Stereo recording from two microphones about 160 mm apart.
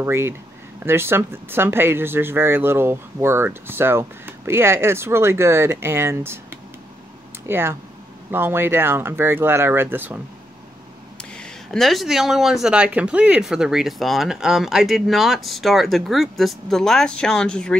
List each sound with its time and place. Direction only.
0.0 s speech: 15° right (ahead or behind)
11.1 s speech: 5° left (ahead or behind)